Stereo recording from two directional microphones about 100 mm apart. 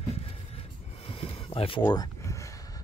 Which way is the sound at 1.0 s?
75° left (ahead or behind).